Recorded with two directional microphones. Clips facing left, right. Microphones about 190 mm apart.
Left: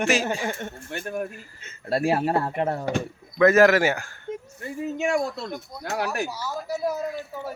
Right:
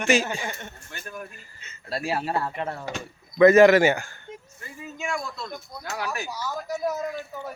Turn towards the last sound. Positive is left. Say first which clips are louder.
# left 1 dB
turn(degrees=10)  # may be behind; listen again after turning